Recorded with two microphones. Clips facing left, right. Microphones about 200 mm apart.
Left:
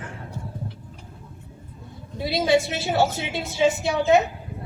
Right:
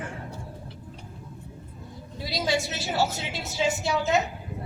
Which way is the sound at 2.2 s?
60° left (ahead or behind).